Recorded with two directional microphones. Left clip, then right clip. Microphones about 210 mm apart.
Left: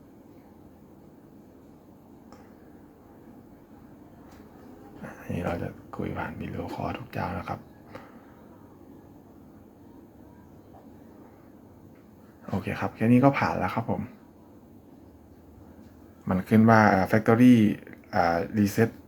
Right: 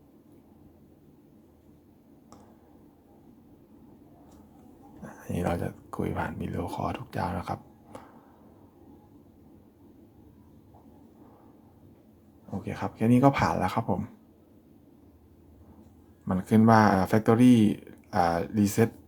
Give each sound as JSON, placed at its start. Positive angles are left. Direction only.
{"t": 5.0, "sound": "speech", "side_deg": -25}
{"t": 12.6, "sound": "speech", "side_deg": -15}
{"t": 16.2, "sound": "speech", "side_deg": -15}